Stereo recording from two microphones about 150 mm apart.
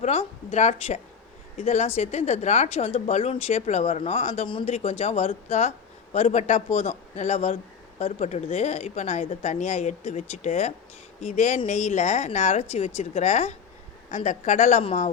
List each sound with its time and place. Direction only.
0.0 s speech: 45° left (ahead or behind)